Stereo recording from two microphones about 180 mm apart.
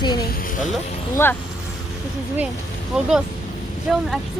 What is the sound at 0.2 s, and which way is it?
Music, 55° left (ahead or behind).